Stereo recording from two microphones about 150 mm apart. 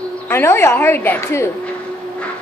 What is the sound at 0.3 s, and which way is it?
A woman's voice, 15° left (ahead or behind).